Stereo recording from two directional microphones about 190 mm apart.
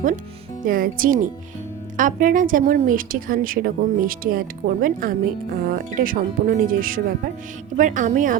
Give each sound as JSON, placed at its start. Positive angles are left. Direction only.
{"t": 0.6, "sound": "a woman's voice", "side_deg": -45}